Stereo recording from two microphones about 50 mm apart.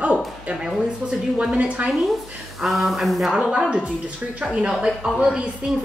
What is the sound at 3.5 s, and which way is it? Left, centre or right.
Speech, centre.